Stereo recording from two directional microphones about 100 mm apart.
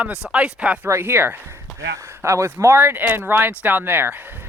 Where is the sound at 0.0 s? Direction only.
10° right (ahead or behind).